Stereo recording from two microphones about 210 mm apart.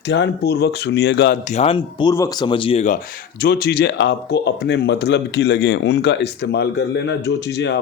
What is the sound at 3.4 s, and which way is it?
Speech, 50° left (ahead or behind).